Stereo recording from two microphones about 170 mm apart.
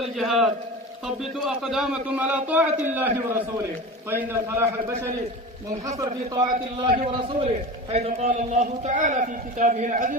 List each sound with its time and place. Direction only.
0.2 s a man's voice: centre (ahead or behind)
6.0 s a man's voice: 25° right (ahead or behind); by 10.2 s 50° right (ahead or behind)